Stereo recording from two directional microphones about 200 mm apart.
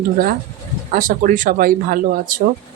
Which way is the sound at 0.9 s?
40° right (ahead or behind).